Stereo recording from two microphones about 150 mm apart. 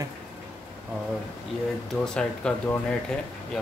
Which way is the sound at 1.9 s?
5° left (ahead or behind).